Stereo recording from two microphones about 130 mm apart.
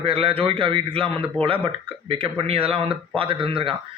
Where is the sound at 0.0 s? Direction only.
45° right (ahead or behind).